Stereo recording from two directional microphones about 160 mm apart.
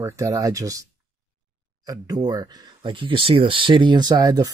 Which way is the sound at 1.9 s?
25° right (ahead or behind).